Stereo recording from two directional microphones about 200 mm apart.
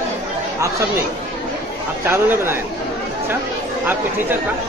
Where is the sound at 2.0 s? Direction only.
10° right (ahead or behind).